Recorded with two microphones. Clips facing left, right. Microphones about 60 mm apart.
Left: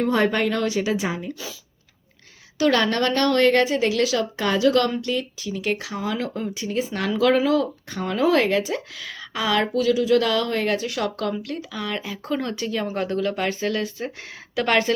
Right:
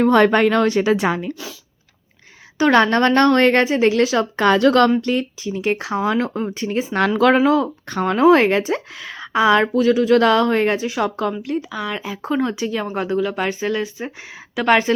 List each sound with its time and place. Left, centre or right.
0.1 s speech: right
2.6 s speech: right
4.4 s speech: right
4.9 s speech: right
7.9 s speech: right
8.1 s speech: right
10.8 s speech: centre